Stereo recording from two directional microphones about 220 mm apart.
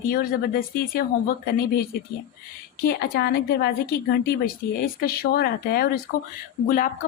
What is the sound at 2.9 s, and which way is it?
Speech, 45° left (ahead or behind).